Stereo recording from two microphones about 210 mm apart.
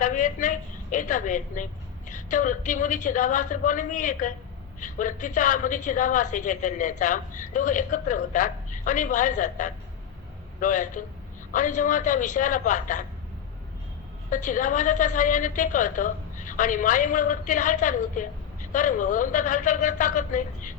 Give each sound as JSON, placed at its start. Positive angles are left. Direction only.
{"t": 0.0, "sound": "a woman's voice", "side_deg": 35}
{"t": 14.3, "sound": "a woman's voice", "side_deg": 35}